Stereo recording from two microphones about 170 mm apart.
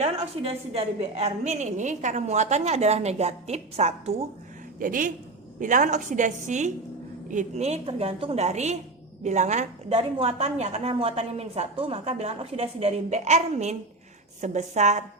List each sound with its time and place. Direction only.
0.0 s a woman's voice: 35° right (ahead or behind)
4.8 s a woman's voice: 50° right (ahead or behind)